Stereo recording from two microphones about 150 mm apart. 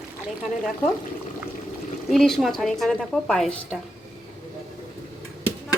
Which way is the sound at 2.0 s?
Centre (ahead or behind).